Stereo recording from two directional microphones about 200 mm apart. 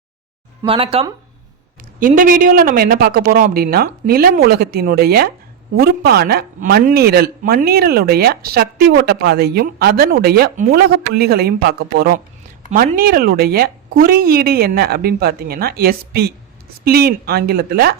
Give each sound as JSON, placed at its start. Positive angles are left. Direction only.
{"t": 0.6, "sound": "speech", "side_deg": -25}
{"t": 2.0, "sound": "speech", "side_deg": -45}